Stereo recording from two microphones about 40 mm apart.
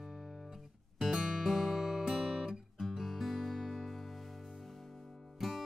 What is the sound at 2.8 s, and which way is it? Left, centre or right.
Guitar, centre.